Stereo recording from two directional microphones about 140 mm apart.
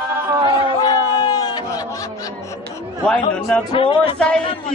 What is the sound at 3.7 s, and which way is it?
Music, 40° left (ahead or behind).